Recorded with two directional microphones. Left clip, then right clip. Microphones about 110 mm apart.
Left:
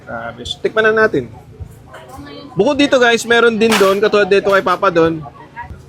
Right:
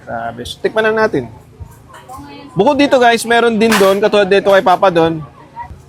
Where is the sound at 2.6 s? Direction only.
30° right (ahead or behind).